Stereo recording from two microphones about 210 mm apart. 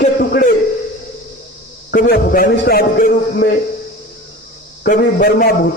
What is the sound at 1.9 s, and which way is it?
A man's voice, 45° left (ahead or behind).